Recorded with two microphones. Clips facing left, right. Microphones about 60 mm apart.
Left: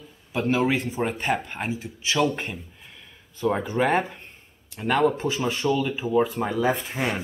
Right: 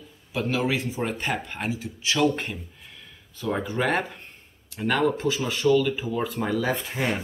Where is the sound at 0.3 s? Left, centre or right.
Left.